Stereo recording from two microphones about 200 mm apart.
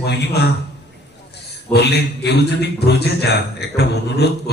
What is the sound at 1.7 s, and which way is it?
A man's voice, 55° left (ahead or behind).